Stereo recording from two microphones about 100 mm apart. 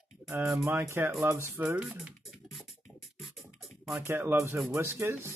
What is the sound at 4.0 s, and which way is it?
Speech, 25° right (ahead or behind).